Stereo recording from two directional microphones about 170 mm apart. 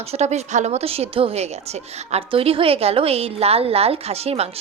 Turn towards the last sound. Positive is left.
turn(degrees=-35)  # may be behind; listen again after turning